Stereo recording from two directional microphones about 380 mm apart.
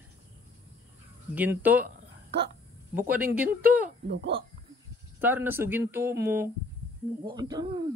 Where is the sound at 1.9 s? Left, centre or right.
Right.